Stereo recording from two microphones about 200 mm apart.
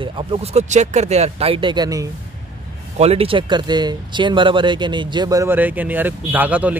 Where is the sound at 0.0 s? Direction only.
30° right (ahead or behind).